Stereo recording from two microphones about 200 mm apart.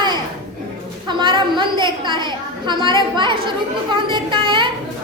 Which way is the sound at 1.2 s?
25° right (ahead or behind).